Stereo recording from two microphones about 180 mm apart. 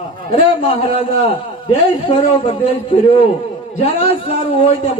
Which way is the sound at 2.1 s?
30° left (ahead or behind).